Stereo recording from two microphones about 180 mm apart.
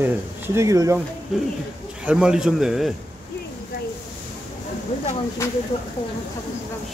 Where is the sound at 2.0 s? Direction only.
5° right (ahead or behind).